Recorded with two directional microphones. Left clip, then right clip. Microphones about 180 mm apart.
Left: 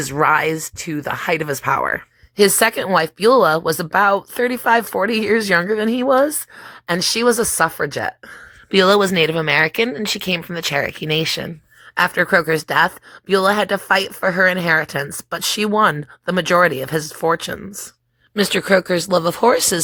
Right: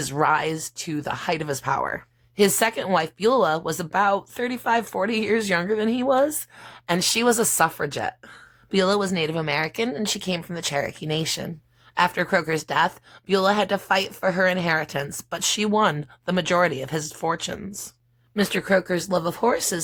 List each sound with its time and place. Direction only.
0.0 s speech: 15° left (ahead or behind)
18.3 s speech: 30° left (ahead or behind)